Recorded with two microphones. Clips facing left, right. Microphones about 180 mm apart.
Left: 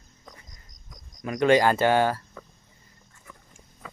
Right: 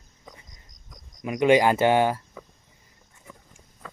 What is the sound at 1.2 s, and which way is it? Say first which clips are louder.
Speech: right 1 dB; 10° right (ahead or behind).